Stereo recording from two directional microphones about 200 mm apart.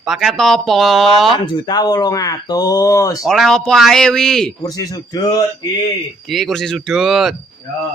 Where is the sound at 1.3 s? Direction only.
20° left (ahead or behind).